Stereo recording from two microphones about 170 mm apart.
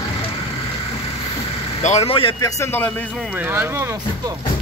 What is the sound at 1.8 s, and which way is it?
Speech, 40° left (ahead or behind).